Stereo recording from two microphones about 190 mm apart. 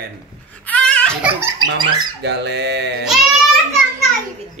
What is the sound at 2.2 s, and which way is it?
Dog, 65° right (ahead or behind).